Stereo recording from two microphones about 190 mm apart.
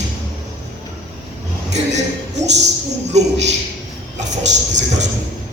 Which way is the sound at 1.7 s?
35° right (ahead or behind).